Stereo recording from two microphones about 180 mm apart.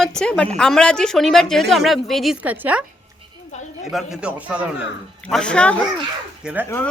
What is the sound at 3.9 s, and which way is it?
Speech, 5° right (ahead or behind).